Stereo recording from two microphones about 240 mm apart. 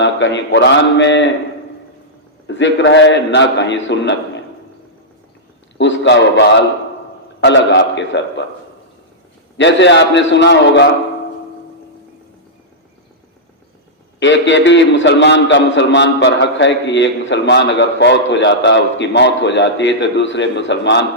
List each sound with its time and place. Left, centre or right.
0.0 s a man's voice: left
2.5 s a man's voice: left
5.7 s a man's voice: left
9.6 s a man's voice: left
14.2 s a man's voice: left